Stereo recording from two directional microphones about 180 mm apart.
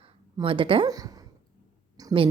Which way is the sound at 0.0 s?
30° right (ahead or behind).